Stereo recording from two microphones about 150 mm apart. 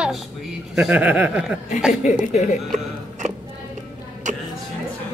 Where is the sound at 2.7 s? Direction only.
50° right (ahead or behind).